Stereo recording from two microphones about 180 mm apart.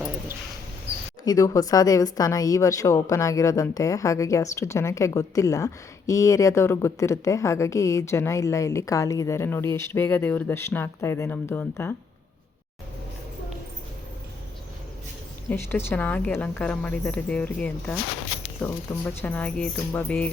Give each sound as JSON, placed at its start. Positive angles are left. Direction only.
{"t": 1.2, "sound": "a woman's voice", "side_deg": 20}
{"t": 15.4, "sound": "a woman's voice", "side_deg": 10}